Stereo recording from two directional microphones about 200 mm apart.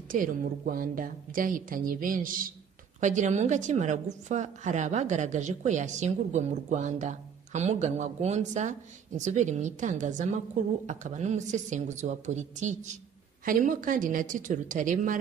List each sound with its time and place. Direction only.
0.1 s a woman's voice: 45° right (ahead or behind)